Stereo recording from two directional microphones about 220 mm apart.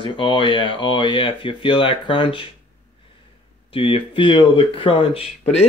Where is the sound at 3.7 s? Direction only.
25° left (ahead or behind).